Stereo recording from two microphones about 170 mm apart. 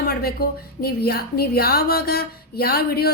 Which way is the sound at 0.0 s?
65° left (ahead or behind).